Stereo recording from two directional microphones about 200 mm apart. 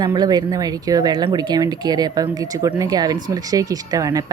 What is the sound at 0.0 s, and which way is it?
Speech, 20° right (ahead or behind).